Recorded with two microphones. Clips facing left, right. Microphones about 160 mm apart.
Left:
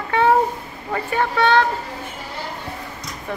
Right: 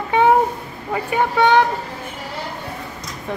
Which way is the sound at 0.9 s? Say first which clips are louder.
Right 2 dB; 15° right (ahead or behind).